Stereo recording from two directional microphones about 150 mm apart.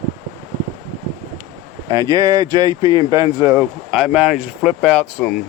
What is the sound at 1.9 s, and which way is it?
Speech, 25° right (ahead or behind).